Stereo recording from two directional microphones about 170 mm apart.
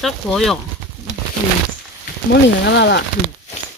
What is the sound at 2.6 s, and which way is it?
Speech, 90° left.